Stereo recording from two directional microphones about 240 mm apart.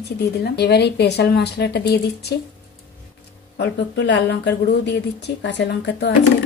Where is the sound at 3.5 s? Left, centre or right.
Left.